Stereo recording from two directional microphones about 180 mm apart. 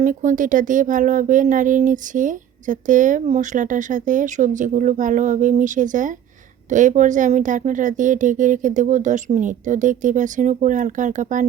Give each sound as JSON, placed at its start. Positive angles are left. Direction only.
{"t": 0.0, "sound": "speech", "side_deg": -45}